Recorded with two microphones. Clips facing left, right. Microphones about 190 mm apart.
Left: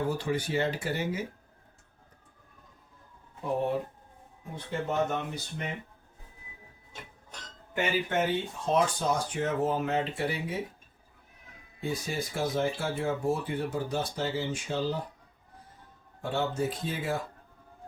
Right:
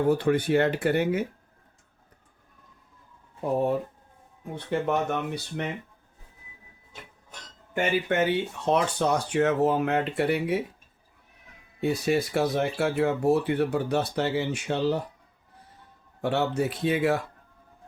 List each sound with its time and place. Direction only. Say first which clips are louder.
0.1 s speech: right 8 dB; 60° right (ahead or behind)
4.5 s speech: right 4 dB; 65° right (ahead or behind)
7.8 s speech: right 4 dB; 65° right (ahead or behind)
11.8 s speech: right 8 dB; 70° right (ahead or behind)
16.2 s speech: right 4 dB; 70° right (ahead or behind)